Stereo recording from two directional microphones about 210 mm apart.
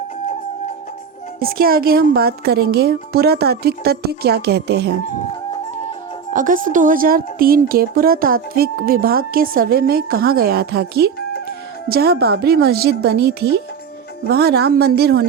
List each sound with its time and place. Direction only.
1.4 s a woman's voice: 45° right (ahead or behind)
6.3 s a woman's voice: 40° right (ahead or behind)